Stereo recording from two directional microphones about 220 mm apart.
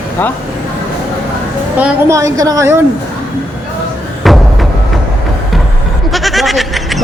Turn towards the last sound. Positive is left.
turn(degrees=0)  # may be behind; listen again after turning